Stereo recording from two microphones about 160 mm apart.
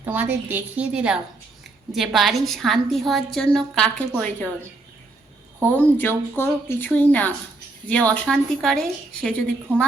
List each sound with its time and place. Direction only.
0.0 s a woman's voice: 10° right (ahead or behind); by 4.4 s 5° left (ahead or behind)
5.6 s a woman's voice: 10° left (ahead or behind)